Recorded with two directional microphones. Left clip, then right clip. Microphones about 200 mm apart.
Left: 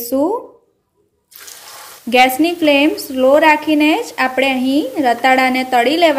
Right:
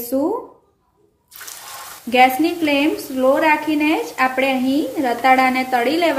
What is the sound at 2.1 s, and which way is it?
A woman's voice, 45° left (ahead or behind).